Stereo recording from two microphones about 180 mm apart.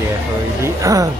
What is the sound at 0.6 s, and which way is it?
Speech, 20° right (ahead or behind).